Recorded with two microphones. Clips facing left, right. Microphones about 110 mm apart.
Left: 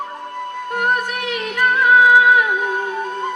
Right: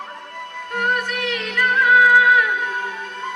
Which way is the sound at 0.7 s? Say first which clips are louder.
Left 2 dB; 15° left (ahead or behind).